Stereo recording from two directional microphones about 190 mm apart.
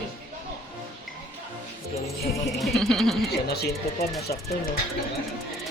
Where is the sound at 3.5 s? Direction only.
60° left (ahead or behind).